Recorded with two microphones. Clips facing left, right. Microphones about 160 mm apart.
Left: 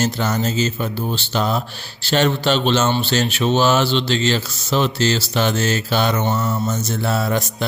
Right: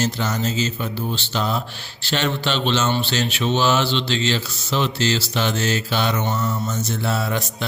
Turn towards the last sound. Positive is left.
turn(degrees=45)  # may be behind; listen again after turning